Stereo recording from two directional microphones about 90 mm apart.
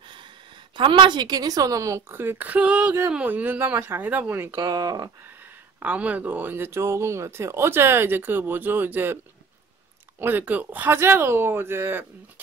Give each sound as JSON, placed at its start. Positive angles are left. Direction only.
{"t": 0.7, "sound": "a woman's voice", "side_deg": -70}
{"t": 4.6, "sound": "speech", "side_deg": -45}
{"t": 5.8, "sound": "speech", "side_deg": -15}